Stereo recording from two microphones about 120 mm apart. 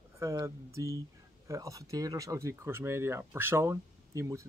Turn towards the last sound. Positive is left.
turn(degrees=-25)  # may be behind; listen again after turning